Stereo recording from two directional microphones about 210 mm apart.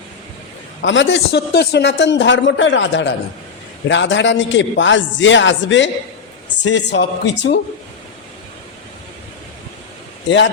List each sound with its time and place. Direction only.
0.8 s a man's voice: 60° left (ahead or behind)
10.2 s a man's voice: 60° left (ahead or behind)